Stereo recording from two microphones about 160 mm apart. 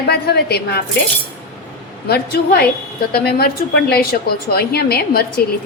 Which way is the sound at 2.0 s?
80° left.